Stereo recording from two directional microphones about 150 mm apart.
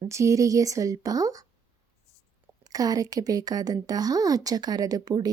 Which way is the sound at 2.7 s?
25° right (ahead or behind).